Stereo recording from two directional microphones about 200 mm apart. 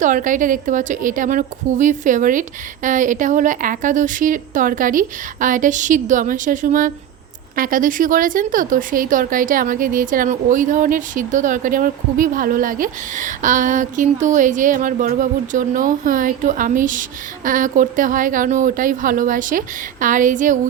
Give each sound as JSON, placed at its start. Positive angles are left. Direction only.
{"t": 0.0, "sound": "speech", "side_deg": -40}